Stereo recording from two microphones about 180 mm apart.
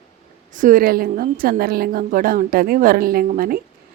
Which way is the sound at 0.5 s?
45° right (ahead or behind).